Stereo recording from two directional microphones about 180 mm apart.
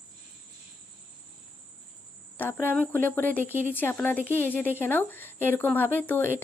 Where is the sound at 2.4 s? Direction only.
10° left (ahead or behind).